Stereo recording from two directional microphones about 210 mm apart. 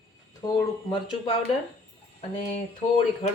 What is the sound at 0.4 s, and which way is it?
Speech, 20° left (ahead or behind).